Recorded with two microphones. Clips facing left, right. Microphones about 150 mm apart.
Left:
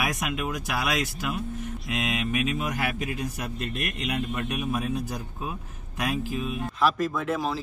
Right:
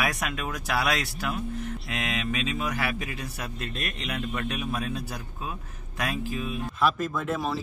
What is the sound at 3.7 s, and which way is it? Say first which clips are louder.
A man's voice: left 3 dB; 15° left (ahead or behind).